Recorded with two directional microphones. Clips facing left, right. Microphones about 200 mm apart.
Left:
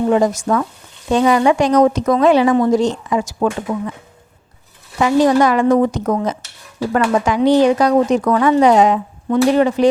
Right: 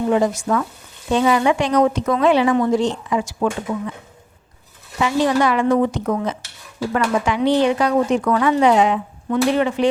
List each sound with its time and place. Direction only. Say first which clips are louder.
0.1 s speech: left 3 dB; 45° left (ahead or behind)
4.9 s speech: left 5 dB; 45° left (ahead or behind)